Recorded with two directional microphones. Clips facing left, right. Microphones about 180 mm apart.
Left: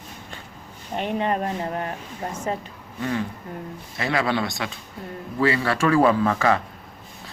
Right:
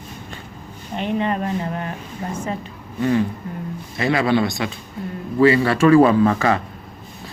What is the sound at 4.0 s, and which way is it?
A man's voice, 20° right (ahead or behind).